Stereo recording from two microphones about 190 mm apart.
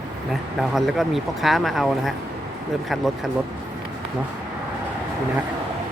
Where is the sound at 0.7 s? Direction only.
Centre (ahead or behind).